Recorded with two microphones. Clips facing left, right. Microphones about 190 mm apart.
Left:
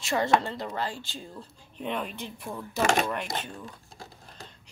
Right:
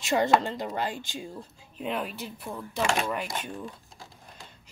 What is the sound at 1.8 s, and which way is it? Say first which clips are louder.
Speech: right 1 dB; 5° right (ahead or behind).